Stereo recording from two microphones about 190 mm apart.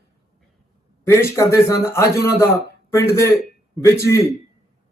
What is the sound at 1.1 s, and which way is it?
A man's voice, 15° left (ahead or behind).